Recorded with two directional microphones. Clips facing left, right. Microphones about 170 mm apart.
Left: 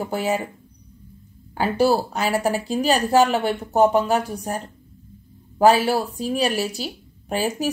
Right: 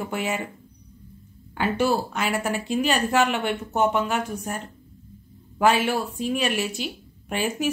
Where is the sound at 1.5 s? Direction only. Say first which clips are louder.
Left 4 dB; 35° left (ahead or behind).